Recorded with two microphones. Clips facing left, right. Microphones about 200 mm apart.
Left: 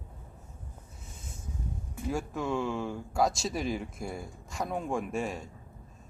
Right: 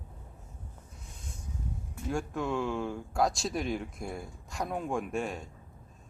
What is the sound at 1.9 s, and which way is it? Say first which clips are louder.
Speech: even; centre (ahead or behind).